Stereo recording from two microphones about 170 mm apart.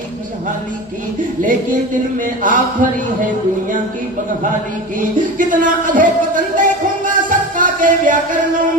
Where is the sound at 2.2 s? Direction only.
50° right (ahead or behind).